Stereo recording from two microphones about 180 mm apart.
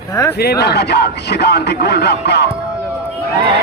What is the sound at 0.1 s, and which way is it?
Speech, 20° left (ahead or behind).